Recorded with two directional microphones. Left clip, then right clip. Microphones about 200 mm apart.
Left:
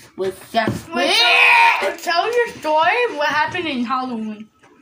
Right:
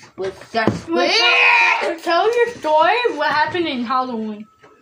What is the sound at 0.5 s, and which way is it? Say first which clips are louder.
Speech: right 3 dB; 40° left (ahead or behind).